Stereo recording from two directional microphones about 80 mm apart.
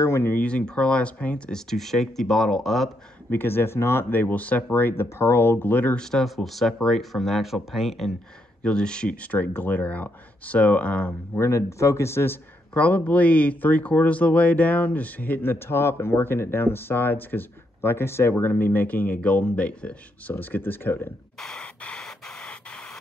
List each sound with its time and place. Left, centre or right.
0.0 s speech: left; by 2.9 s centre
3.3 s speech: left
5.9 s speech: centre
8.6 s speech: centre
11.3 s speech: left
12.7 s speech: centre
21.4 s a sound: centre